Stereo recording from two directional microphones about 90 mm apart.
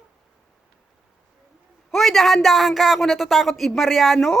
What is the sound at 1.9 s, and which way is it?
Speech, centre (ahead or behind).